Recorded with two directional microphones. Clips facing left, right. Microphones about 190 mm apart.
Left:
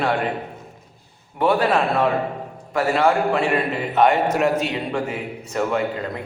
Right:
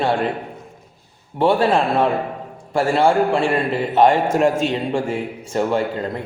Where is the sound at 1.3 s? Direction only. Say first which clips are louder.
Right 2 dB; 30° right (ahead or behind).